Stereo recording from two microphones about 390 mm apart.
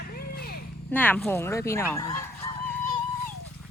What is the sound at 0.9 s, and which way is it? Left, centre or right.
Speech, centre.